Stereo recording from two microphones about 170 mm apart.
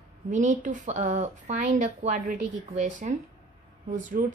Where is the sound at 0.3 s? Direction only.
45° right (ahead or behind).